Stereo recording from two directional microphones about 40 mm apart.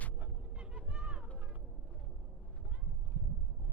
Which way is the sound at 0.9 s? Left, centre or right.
Right.